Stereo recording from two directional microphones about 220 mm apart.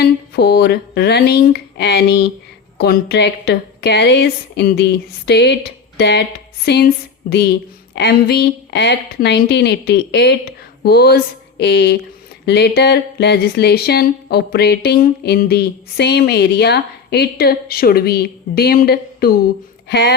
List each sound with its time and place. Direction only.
0.0 s speech: 45° left (ahead or behind)